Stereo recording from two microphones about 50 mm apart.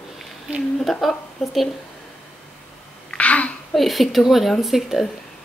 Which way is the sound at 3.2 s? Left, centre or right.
Left.